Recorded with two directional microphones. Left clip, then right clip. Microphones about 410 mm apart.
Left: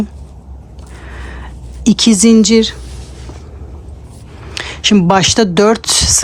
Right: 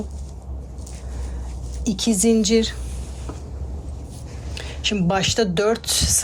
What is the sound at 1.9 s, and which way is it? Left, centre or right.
Speech, centre.